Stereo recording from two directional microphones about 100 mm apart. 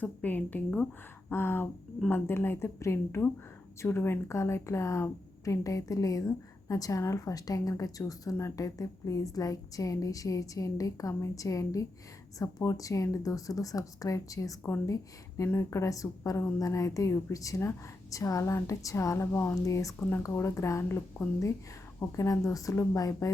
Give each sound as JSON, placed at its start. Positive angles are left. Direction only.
{"t": 0.0, "sound": "a woman's voice", "side_deg": 15}
{"t": 20.0, "sound": "speech", "side_deg": 20}
{"t": 20.2, "sound": "a woman's voice", "side_deg": 30}